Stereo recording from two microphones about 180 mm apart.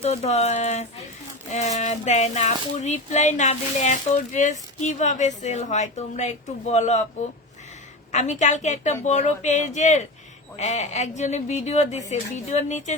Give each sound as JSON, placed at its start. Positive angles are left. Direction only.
{"t": 0.0, "sound": "speech", "side_deg": 35}
{"t": 8.1, "sound": "speech", "side_deg": 40}